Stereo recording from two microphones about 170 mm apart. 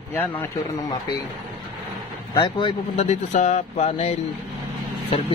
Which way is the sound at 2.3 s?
30° left (ahead or behind).